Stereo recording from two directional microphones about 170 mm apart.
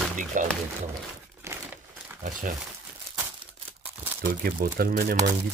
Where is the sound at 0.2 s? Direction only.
50° right (ahead or behind).